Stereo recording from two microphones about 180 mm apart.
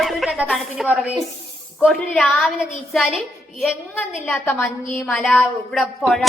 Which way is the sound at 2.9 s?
Centre (ahead or behind).